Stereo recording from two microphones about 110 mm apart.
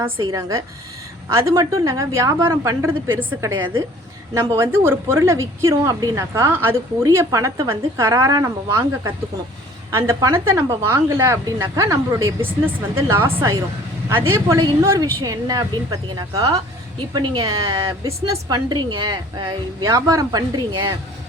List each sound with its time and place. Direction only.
0.2 s a woman's voice: 35° right (ahead or behind)
6.5 s a woman's voice: 20° right (ahead or behind); by 19.5 s 45° right (ahead or behind)
19.8 s a woman's voice: 30° right (ahead or behind)